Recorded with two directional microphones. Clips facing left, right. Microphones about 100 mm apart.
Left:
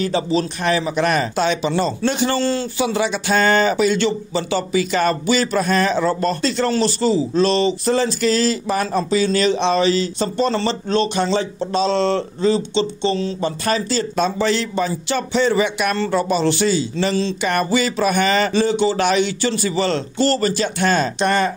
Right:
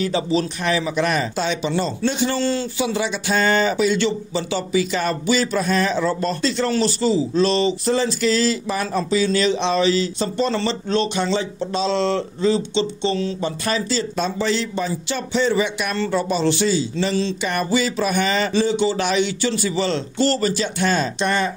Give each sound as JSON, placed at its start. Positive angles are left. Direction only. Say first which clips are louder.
{"t": 0.0, "sound": "speech", "louder": "left 1 dB", "side_deg": 40}
{"t": 2.4, "sound": "speech", "louder": "left 2 dB", "side_deg": 45}
{"t": 14.1, "sound": "speech", "louder": "left 4 dB", "side_deg": 65}